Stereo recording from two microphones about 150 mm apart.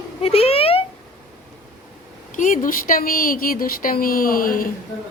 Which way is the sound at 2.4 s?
60° left (ahead or behind).